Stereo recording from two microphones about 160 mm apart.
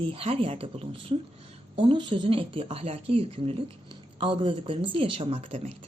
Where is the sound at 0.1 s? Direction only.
35° right (ahead or behind).